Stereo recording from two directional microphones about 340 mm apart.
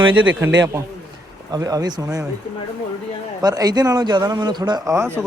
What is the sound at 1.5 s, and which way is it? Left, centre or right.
Speech, centre.